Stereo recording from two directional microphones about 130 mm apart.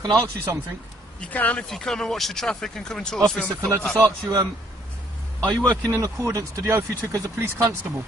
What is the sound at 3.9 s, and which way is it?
Speech, 20° right (ahead or behind).